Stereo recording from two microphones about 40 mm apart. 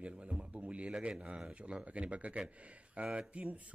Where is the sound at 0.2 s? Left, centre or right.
Right.